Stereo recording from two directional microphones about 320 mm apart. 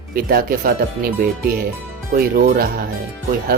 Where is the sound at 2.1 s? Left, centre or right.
Right.